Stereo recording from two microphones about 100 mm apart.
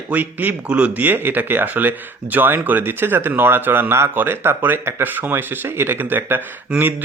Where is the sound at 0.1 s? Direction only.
15° right (ahead or behind).